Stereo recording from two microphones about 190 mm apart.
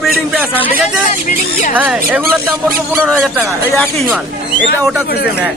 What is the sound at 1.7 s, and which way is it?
A man's voice, 10° right (ahead or behind).